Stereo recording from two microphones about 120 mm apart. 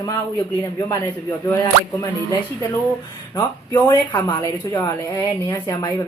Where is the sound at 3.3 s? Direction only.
30° left (ahead or behind).